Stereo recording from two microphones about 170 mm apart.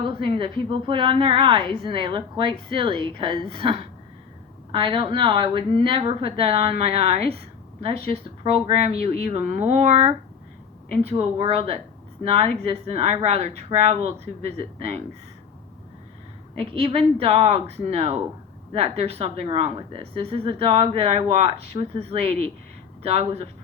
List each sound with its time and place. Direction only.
0.0 s a woman's voice: 30° right (ahead or behind)
16.6 s a woman's voice: 35° right (ahead or behind)